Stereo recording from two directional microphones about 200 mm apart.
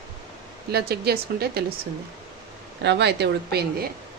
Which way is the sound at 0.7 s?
50° right (ahead or behind).